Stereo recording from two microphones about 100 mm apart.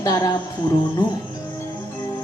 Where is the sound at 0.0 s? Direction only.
35° left (ahead or behind).